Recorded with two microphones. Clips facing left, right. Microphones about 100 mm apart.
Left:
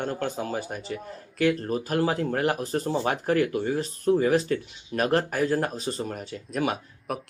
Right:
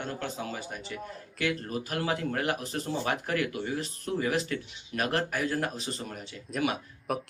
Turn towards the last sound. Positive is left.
turn(degrees=0)  # may be behind; listen again after turning